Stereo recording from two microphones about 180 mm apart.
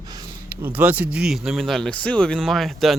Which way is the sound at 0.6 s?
10° right (ahead or behind).